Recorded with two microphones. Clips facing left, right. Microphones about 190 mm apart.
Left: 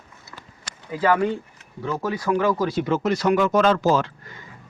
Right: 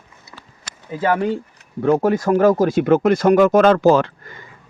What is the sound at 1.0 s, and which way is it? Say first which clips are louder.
Speech: right 1 dB; 25° right (ahead or behind).